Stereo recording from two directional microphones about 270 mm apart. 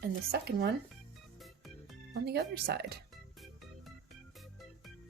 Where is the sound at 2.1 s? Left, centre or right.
Right.